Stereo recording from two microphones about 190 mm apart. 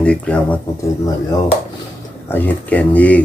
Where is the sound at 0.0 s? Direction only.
5° left (ahead or behind).